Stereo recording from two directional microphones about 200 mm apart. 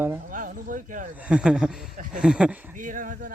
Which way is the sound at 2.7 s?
40° right (ahead or behind).